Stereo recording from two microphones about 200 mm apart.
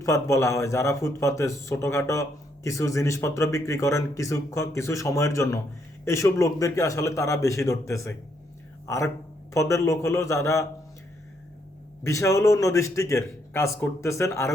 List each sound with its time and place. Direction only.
0.0 s speech: 15° left (ahead or behind)
12.0 s speech: 15° left (ahead or behind)